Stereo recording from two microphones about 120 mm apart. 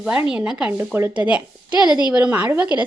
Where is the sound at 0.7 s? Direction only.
20° right (ahead or behind).